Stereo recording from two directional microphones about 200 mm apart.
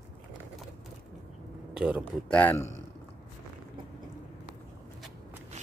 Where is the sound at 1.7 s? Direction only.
5° right (ahead or behind).